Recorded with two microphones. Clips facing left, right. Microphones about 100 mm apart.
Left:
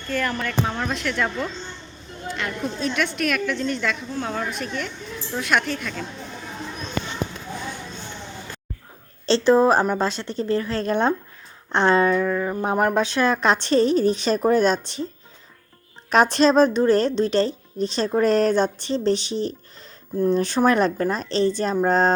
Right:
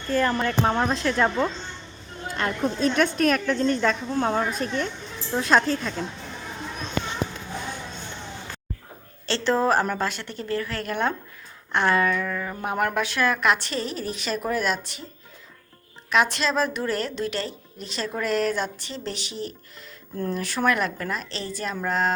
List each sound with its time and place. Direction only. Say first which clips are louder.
0.1 s a woman's voice: right 3 dB; 30° right (ahead or behind)
9.2 s a woman's voice: left 6 dB; 20° left (ahead or behind)
16.0 s a woman's voice: left 6 dB; 35° left (ahead or behind)